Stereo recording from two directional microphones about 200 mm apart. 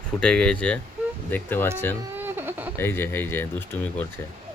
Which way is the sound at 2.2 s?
10° right (ahead or behind).